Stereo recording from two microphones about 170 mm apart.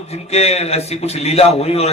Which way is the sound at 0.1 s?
40° left (ahead or behind).